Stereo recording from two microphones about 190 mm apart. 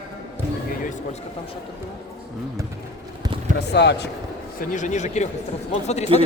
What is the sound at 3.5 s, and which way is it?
Speech, 60° left (ahead or behind).